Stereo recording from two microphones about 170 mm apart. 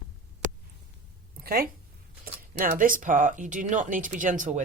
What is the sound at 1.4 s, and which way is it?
Speech, 60° right (ahead or behind).